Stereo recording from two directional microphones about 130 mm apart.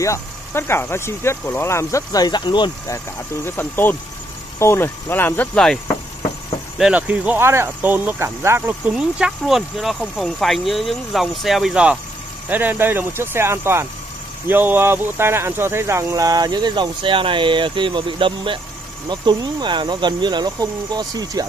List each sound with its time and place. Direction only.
0.0 s speech: 20° left (ahead or behind)
3.4 s speech: 15° left (ahead or behind)
6.8 s speech: 10° right (ahead or behind)
8.9 s speech: 5° right (ahead or behind); by 21.5 s 30° right (ahead or behind)